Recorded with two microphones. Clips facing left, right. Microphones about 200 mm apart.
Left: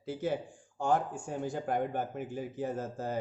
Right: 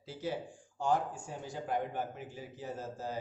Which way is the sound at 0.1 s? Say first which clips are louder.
Left 5 dB; 55° left (ahead or behind).